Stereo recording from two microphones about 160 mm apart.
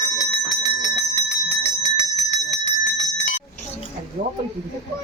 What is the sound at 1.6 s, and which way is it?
Bell, 45° left (ahead or behind).